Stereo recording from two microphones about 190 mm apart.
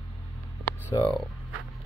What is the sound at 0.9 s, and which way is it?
Speech, 25° left (ahead or behind).